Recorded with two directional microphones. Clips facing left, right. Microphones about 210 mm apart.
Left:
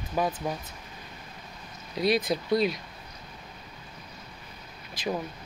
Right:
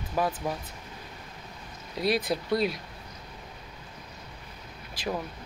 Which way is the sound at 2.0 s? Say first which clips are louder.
Left 2 dB; 5° right (ahead or behind).